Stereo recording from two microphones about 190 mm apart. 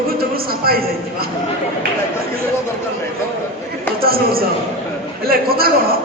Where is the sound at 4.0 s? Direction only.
50° right (ahead or behind).